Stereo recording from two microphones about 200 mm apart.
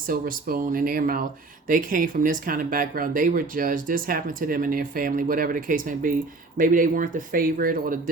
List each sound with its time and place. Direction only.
0.1 s speech: 45° right (ahead or behind)